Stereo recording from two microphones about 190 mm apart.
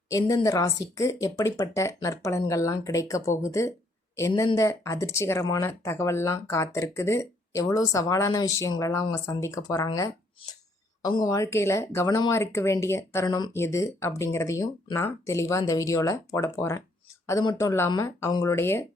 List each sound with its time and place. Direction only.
0.1 s speech: 15° left (ahead or behind)